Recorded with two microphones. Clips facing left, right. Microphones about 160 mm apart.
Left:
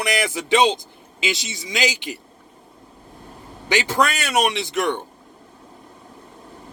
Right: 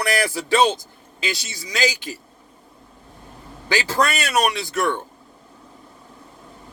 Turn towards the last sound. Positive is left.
turn(degrees=20)  # may be behind; listen again after turning